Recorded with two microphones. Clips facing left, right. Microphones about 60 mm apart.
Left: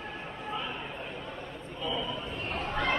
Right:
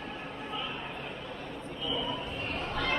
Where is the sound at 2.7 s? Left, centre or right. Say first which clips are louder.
Left 3 dB; left.